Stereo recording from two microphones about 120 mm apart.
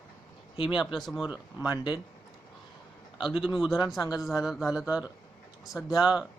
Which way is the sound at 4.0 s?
30° left (ahead or behind).